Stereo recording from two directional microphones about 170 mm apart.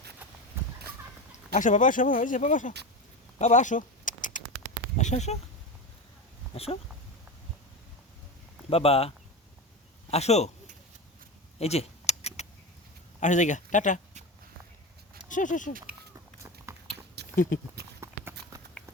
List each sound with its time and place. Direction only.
0.6 s a sound: 15° right (ahead or behind)
1.5 s speech: 50° left (ahead or behind)
3.3 s a sound: 45° left (ahead or behind)
4.9 s speech: 40° left (ahead or behind)
6.5 s speech: 35° left (ahead or behind)
8.7 s speech: 35° left (ahead or behind)
11.6 s a sound: 40° left (ahead or behind)
13.1 s speech: 45° left (ahead or behind)
15.3 s speech: 50° left (ahead or behind)
16.7 s biting: 15° right (ahead or behind)
17.2 s a sound: 75° right (ahead or behind)
18.0 s clip-clop: 15° right (ahead or behind)